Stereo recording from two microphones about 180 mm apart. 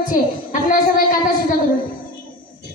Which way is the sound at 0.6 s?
50° left (ahead or behind).